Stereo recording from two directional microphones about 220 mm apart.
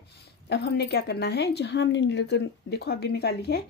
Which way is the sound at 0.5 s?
45° left (ahead or behind).